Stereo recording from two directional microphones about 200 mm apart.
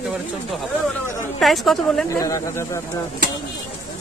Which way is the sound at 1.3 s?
Centre (ahead or behind).